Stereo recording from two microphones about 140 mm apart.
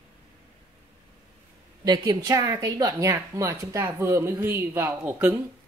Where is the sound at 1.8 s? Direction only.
25° right (ahead or behind).